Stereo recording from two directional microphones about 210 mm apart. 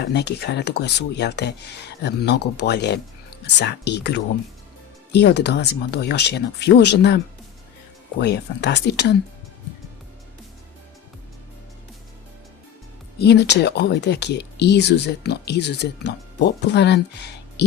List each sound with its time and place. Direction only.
0.0 s speech: 55° left (ahead or behind)
8.2 s speech: 55° left (ahead or behind)
13.1 s speech: 50° left (ahead or behind)